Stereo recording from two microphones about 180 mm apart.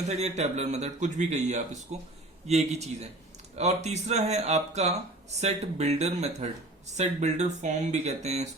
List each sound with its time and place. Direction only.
0.1 s speech: 40° right (ahead or behind)